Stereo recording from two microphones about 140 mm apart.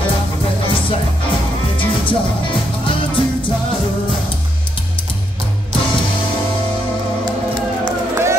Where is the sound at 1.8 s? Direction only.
35° left (ahead or behind).